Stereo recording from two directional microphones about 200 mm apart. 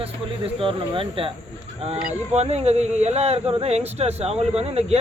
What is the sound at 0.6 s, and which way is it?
Speech, 25° right (ahead or behind).